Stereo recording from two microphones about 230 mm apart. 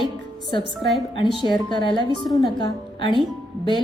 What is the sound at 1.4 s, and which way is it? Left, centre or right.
A woman's voice, centre.